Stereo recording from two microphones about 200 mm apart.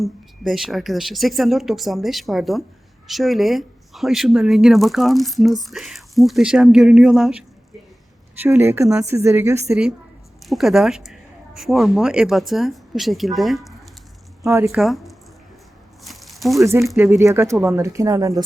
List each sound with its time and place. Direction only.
0.0 s a woman's voice: centre (ahead or behind)
14.4 s speech: 10° right (ahead or behind)
14.8 s speech: centre (ahead or behind)
16.0 s a sound: centre (ahead or behind)
16.6 s speech: 15° right (ahead or behind)